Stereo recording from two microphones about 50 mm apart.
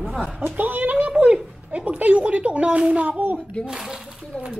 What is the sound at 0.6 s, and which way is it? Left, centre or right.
A woman's voice, right.